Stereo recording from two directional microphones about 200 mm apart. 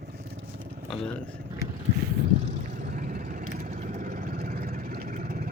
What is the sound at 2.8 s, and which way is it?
Vehicle, 40° right (ahead or behind).